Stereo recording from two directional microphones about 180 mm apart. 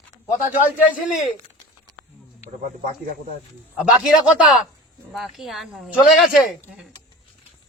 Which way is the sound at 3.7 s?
5° right (ahead or behind).